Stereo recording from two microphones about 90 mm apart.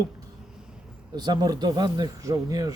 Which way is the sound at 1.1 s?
50° right (ahead or behind).